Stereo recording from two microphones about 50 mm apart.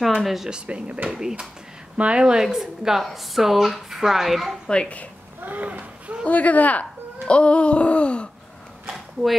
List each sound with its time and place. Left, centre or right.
0.0 s speech: centre
0.5 s a woman's voice: right; by 4.6 s centre
4.6 s a woman's voice: centre
5.4 s speech: right
6.2 s speech: left
8.8 s a sound: centre